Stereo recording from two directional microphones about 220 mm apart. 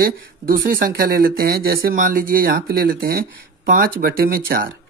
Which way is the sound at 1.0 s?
40° right (ahead or behind).